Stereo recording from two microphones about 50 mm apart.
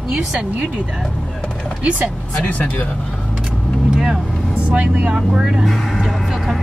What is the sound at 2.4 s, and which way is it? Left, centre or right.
Speech, left.